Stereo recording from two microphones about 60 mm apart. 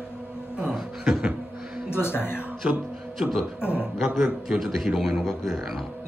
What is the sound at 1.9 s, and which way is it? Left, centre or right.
Speech, left.